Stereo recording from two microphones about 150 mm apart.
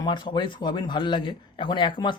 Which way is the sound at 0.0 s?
30° left (ahead or behind).